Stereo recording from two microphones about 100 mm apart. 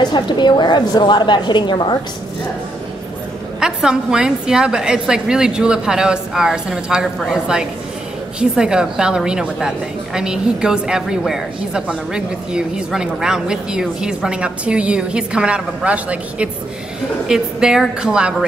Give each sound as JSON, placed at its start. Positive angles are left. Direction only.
{"t": 0.0, "sound": "a woman's voice", "side_deg": 50}
{"t": 3.5, "sound": "a woman's voice", "side_deg": -5}